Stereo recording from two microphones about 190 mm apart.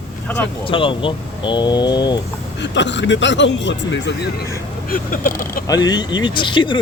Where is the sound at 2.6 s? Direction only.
70° left (ahead or behind).